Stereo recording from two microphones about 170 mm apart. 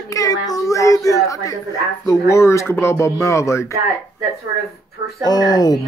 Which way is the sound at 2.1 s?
15° left (ahead or behind).